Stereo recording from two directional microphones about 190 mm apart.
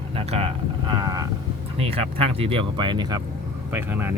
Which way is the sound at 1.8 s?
30° right (ahead or behind).